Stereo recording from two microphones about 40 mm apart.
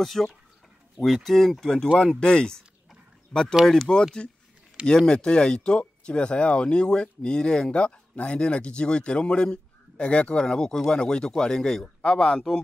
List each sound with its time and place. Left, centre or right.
0.0 s speech: centre
2.1 s a man's voice: left